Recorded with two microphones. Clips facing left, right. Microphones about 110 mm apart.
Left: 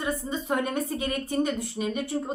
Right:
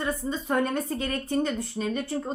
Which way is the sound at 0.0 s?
15° left (ahead or behind).